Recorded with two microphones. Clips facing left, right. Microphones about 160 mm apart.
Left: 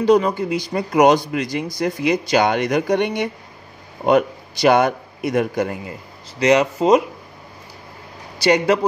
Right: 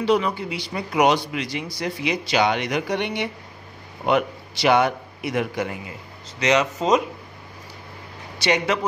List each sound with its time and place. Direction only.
0.0 s a man's voice: 40° left (ahead or behind)
8.4 s speech: 35° left (ahead or behind)